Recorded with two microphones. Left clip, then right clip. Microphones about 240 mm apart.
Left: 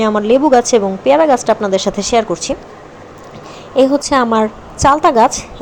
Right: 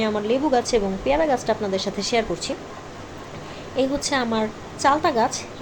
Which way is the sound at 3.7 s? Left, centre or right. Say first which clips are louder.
Left 11 dB; left.